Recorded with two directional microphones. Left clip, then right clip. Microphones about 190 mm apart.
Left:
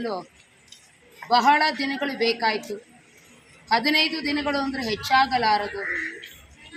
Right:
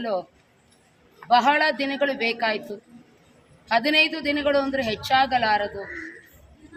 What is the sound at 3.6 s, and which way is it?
A woman's voice, 35° right (ahead or behind).